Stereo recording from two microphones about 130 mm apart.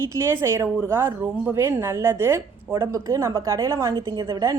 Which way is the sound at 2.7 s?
30° right (ahead or behind).